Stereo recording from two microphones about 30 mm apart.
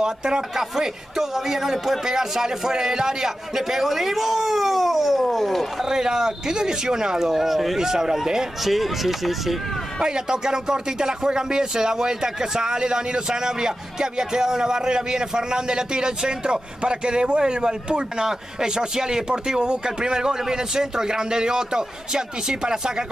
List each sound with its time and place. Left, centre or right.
0.0 s speech: right
0.6 s speech: centre
5.9 s speech: right
7.2 s speech: centre
7.8 s speech: centre
8.6 s speech: centre
10.0 s speech: right
18.2 s speech: centre